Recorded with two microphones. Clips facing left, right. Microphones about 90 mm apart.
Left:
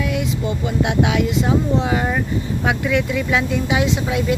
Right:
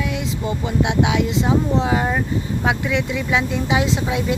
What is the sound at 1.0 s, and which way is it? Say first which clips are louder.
Speech: left 1 dB; 20° right (ahead or behind).